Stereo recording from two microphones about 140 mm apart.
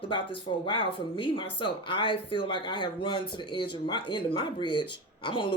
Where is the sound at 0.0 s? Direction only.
35° left (ahead or behind).